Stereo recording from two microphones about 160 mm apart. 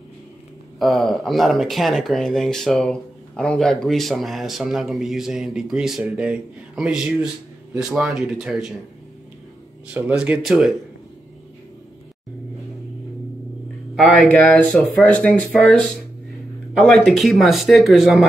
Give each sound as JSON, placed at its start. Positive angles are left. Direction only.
{"t": 0.7, "sound": "speech", "side_deg": 0}
{"t": 9.9, "sound": "speech", "side_deg": -10}
{"t": 14.4, "sound": "speech", "side_deg": 5}